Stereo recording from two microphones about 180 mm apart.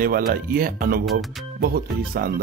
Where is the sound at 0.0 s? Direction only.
55° right (ahead or behind).